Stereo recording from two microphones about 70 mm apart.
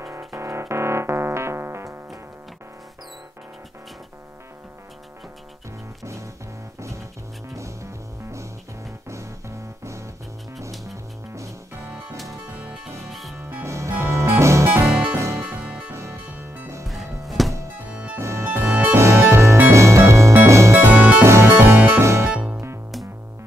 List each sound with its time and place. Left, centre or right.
0.0 s keyboard: right
7.4 s music: right
13.1 s music: centre
13.7 s music: right
14.9 s music: centre
15.1 s music: right
15.6 s music: centre
15.9 s music: right
16.8 s music: centre
18.2 s music: right
20.8 s music: right
21.2 s music: right
22.3 s music: centre